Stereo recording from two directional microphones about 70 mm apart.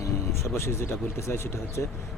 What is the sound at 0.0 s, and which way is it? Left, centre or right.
Speech, left.